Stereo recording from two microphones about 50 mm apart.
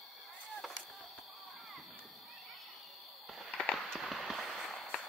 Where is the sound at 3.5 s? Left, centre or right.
Left.